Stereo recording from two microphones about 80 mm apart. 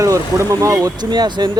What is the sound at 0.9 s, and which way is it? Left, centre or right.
Speech, right.